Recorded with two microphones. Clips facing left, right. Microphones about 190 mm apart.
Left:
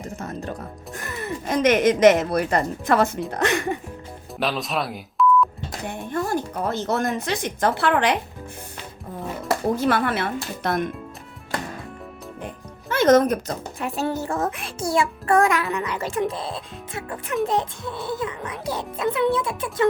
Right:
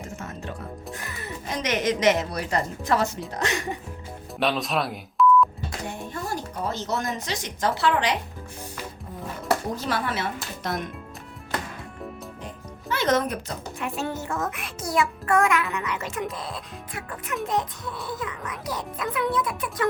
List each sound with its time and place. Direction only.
0.0 s music: 35° left (ahead or behind)
1.5 s a woman's voice: 50° left (ahead or behind)
4.4 s speech: centre (ahead or behind)
6.1 s speech: 55° left (ahead or behind)
9.7 s speech: 55° left (ahead or behind)
12.9 s a woman's voice: 45° left (ahead or behind); by 19.9 s 25° left (ahead or behind)